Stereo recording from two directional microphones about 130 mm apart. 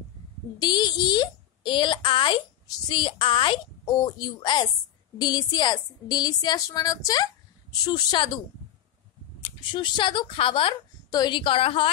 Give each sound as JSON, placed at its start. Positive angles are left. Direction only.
{"t": 0.6, "sound": "a woman's voice", "side_deg": 35}
{"t": 9.4, "sound": "a woman's voice", "side_deg": 40}